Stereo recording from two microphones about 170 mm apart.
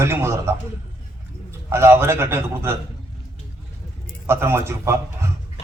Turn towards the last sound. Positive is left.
turn(degrees=-15)  # may be behind; listen again after turning